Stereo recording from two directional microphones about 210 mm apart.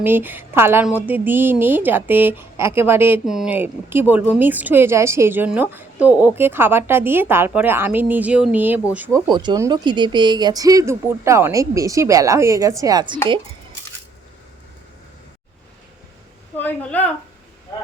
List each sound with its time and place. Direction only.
0.0 s a woman's voice: 10° right (ahead or behind)
9.2 s a woman's voice: 20° right (ahead or behind)
16.6 s a woman's voice: 10° left (ahead or behind)